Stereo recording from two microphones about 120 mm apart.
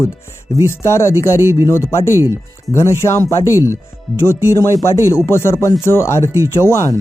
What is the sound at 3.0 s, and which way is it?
Speech, 25° left (ahead or behind).